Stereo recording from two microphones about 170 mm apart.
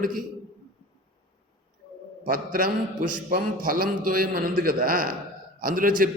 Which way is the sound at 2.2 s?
55° right (ahead or behind).